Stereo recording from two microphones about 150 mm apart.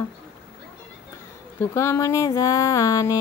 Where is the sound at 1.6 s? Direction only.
20° left (ahead or behind).